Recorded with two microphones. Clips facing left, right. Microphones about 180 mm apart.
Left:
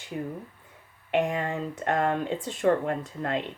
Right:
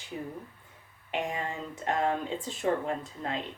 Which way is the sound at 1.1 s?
60° left (ahead or behind).